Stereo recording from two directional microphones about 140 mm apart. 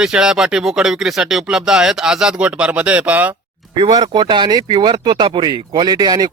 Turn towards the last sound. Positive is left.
turn(degrees=-30)  # may be behind; listen again after turning